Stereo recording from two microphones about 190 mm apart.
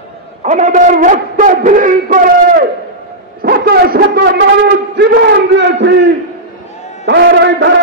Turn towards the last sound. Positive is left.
turn(degrees=-65)  # may be behind; listen again after turning